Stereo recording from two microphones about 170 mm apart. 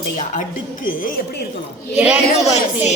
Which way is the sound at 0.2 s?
50° left (ahead or behind).